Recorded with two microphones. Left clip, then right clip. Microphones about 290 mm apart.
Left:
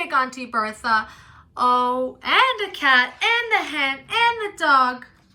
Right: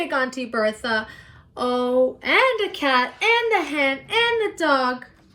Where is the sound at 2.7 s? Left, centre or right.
Right.